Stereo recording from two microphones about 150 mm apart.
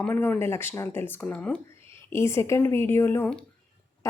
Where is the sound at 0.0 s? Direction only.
15° left (ahead or behind).